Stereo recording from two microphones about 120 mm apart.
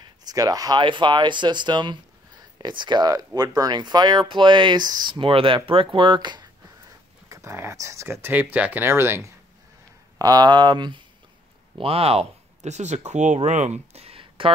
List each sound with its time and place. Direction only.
0.2 s speech: 30° right (ahead or behind)
7.2 s speech: 25° right (ahead or behind)
10.1 s speech: 35° right (ahead or behind)
11.8 s speech: 55° right (ahead or behind)